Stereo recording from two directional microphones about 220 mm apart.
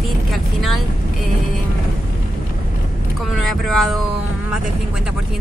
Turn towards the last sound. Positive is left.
turn(degrees=0)  # may be behind; listen again after turning